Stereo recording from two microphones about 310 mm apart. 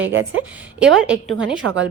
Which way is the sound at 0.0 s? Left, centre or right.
Right.